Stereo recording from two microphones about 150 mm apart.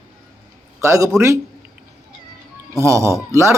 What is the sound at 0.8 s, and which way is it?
Speech, 20° right (ahead or behind).